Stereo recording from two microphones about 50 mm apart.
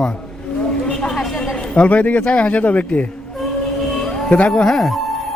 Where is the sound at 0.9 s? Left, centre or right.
Centre.